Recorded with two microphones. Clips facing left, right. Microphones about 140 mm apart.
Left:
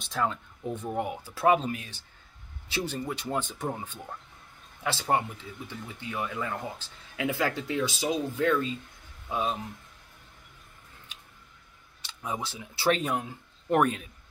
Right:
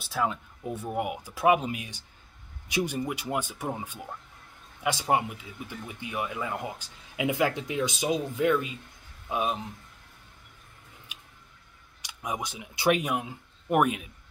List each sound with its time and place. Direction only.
0.0 s speech: 10° right (ahead or behind)
11.1 s tick: 10° right (ahead or behind)
12.0 s speech: 15° right (ahead or behind)